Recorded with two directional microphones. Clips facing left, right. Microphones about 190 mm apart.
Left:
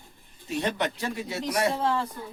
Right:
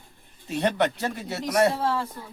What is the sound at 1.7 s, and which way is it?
Speech, 5° right (ahead or behind).